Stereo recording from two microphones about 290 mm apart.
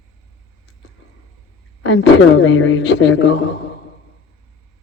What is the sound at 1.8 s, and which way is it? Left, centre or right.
A woman's voice, left.